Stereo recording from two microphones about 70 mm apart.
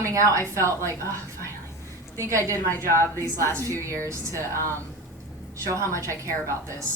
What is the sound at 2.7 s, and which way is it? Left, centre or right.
Speech, left.